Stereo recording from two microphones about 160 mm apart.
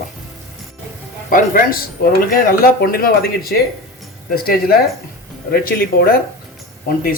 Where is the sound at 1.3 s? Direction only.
65° left (ahead or behind).